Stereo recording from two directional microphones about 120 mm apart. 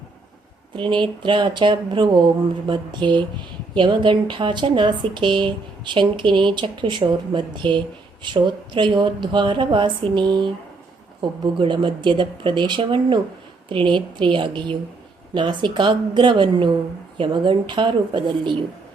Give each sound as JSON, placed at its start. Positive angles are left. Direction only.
{"t": 0.8, "sound": "speech", "side_deg": -40}